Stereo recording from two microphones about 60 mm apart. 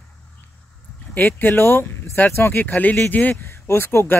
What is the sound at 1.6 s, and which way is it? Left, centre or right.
Speech, left.